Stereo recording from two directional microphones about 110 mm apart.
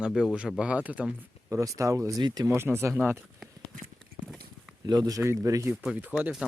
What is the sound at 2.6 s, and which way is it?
Speech, 20° right (ahead or behind).